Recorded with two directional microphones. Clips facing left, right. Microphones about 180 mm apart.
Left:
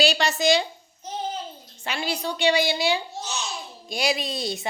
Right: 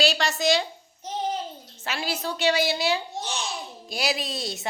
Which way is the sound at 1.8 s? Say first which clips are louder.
Left 1 dB; centre (ahead or behind).